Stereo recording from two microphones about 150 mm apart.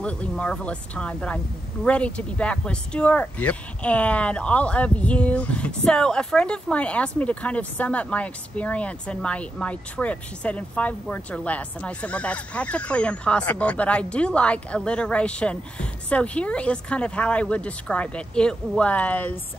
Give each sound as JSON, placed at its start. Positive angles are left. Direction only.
{"t": 0.0, "sound": "speech", "side_deg": 10}